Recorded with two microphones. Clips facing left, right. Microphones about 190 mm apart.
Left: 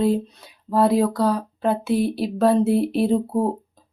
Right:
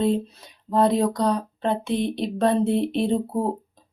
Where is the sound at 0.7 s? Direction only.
5° left (ahead or behind).